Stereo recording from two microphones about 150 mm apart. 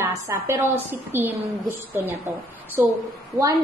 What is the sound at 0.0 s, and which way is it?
A woman's voice, 15° right (ahead or behind).